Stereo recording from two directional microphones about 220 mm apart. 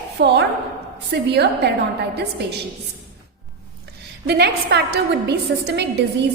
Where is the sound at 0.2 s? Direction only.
50° right (ahead or behind).